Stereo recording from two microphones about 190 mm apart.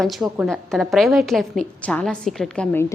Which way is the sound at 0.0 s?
Centre (ahead or behind).